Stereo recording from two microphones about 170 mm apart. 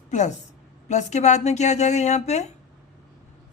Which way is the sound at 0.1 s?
45° left (ahead or behind).